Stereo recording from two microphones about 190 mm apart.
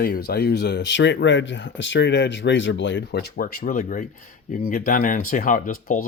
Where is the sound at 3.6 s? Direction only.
40° left (ahead or behind).